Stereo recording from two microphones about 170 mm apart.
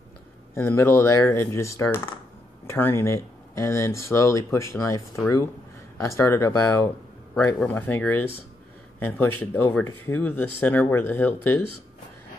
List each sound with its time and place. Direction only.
0.6 s speech: 15° left (ahead or behind)